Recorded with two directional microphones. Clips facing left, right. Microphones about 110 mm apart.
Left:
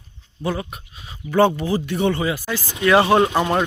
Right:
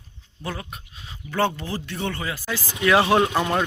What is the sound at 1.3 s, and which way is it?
Speech, 15° left (ahead or behind).